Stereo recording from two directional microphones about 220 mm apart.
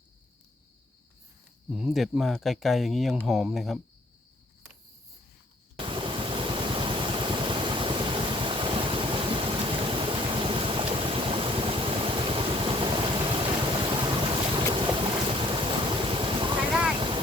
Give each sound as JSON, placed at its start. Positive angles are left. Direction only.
{"t": 1.7, "sound": "speech", "side_deg": 0}
{"t": 5.7, "sound": "vehicle", "side_deg": -25}